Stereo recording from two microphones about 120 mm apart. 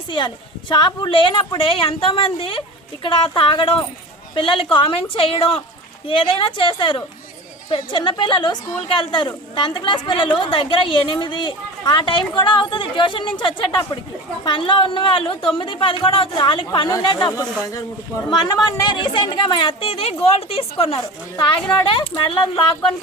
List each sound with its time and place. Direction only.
0.7 s a woman's voice: 40° left (ahead or behind)